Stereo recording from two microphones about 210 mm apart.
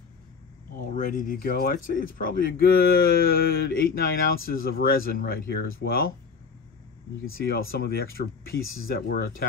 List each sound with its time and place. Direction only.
0.7 s speech: 40° left (ahead or behind)
7.3 s speech: 45° left (ahead or behind)